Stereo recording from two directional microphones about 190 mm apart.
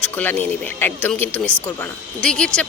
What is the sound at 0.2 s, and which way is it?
Speech, 10° left (ahead or behind).